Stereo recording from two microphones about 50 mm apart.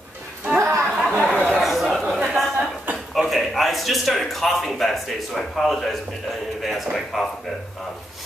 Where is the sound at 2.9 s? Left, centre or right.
Right.